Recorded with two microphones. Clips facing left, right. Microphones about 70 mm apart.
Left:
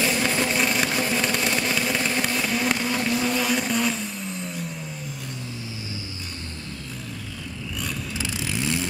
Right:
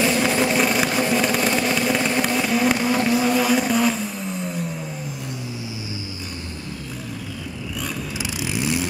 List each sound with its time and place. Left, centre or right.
0.0 s vehicle: centre
8.2 s vehicle: centre